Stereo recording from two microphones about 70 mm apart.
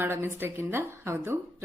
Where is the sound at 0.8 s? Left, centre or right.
Right.